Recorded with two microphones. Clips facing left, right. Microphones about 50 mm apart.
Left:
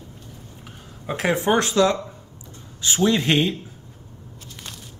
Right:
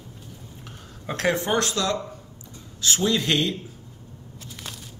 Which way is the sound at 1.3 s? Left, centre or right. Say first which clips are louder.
Left 5 dB; left.